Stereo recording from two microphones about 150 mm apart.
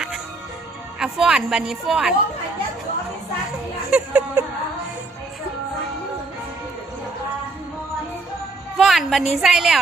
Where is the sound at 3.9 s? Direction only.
10° right (ahead or behind).